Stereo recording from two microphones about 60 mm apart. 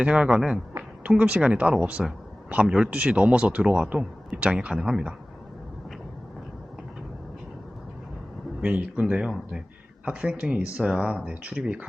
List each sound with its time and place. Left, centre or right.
0.0 s speech: centre
8.6 s speech: centre